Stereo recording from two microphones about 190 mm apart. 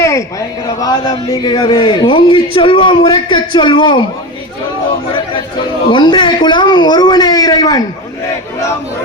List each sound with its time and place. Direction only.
0.0 s speech: 15° left (ahead or behind)
5.1 s speech: 25° left (ahead or behind)